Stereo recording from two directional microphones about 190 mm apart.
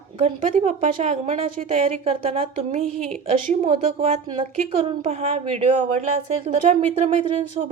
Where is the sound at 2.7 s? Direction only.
45° right (ahead or behind).